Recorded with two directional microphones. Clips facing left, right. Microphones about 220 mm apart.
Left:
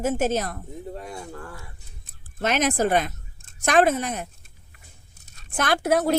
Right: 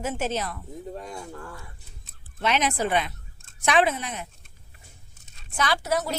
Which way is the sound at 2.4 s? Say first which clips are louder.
Left 3 dB; 45° left (ahead or behind).